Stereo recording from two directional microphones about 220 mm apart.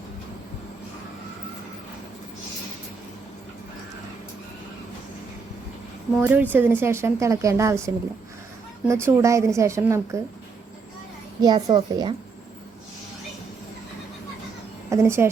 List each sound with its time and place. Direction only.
6.1 s speech: 10° right (ahead or behind)
11.4 s a child's voice: 20° right (ahead or behind)
14.8 s speech: 10° right (ahead or behind)